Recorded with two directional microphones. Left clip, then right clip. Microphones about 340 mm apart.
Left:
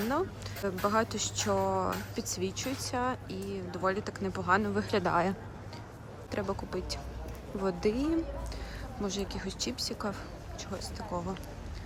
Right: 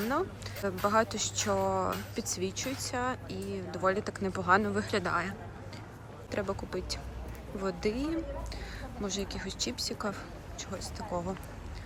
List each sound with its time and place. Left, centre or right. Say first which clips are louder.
0.1 s speech: even; centre
6.3 s a woman's voice: even; centre